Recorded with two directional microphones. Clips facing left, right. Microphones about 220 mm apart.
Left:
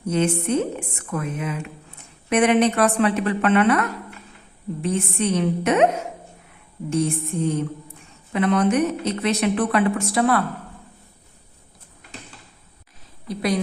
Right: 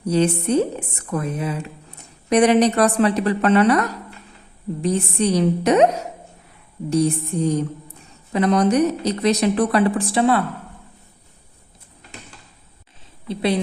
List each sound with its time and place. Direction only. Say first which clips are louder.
0.0 s speech: right 3 dB; 35° right (ahead or behind)
13.2 s a woman's voice: right 2 dB; 25° right (ahead or behind)